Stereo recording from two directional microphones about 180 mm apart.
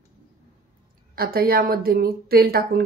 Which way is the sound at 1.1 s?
55° right (ahead or behind).